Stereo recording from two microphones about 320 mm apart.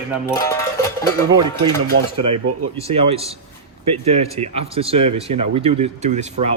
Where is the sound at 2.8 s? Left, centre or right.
Centre.